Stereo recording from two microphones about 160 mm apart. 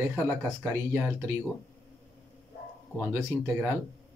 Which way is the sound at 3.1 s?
15° right (ahead or behind).